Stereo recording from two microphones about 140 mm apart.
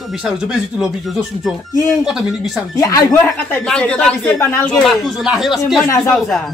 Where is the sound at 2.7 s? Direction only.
25° left (ahead or behind).